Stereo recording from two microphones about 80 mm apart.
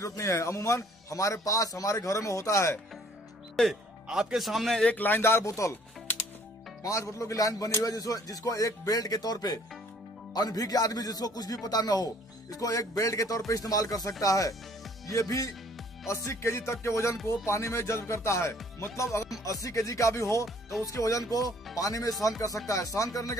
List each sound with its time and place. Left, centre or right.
0.0 s a man's voice: left
3.6 s speech: centre
4.1 s speech: centre
4.8 s a man's voice: left
6.8 s a man's voice: left